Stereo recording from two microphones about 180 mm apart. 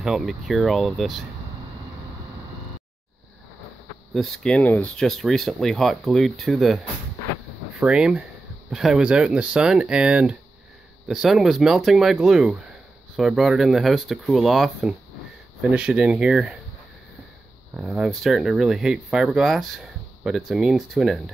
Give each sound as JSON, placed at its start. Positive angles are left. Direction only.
{"t": 0.0, "sound": "speech", "side_deg": 0}
{"t": 4.1, "sound": "speech", "side_deg": 0}
{"t": 7.8, "sound": "speech", "side_deg": -5}
{"t": 17.7, "sound": "speech", "side_deg": -5}